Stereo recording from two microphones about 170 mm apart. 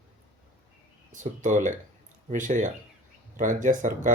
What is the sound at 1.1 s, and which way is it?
Speech, 45° right (ahead or behind).